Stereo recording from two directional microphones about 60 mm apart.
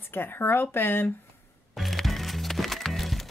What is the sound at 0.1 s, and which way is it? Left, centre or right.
Speech, left.